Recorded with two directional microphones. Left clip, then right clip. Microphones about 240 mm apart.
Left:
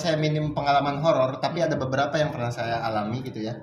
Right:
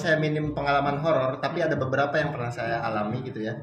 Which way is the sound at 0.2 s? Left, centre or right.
Left.